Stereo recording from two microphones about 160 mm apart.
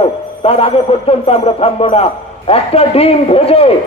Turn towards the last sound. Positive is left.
turn(degrees=40)  # may be behind; listen again after turning